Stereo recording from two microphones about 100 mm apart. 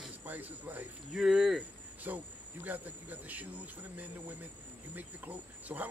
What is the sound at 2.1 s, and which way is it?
Speech, 20° right (ahead or behind).